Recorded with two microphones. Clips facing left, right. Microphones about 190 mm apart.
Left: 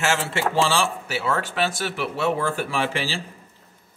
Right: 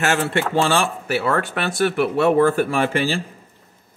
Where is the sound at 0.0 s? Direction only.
60° right (ahead or behind).